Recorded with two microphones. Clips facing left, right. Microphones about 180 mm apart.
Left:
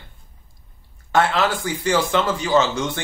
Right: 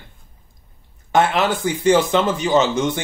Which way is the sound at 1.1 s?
20° right (ahead or behind).